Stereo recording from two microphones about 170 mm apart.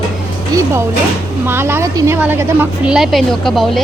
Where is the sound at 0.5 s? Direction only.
20° right (ahead or behind).